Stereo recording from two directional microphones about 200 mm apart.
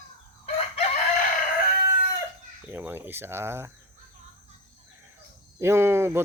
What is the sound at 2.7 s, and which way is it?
Speech, 10° right (ahead or behind).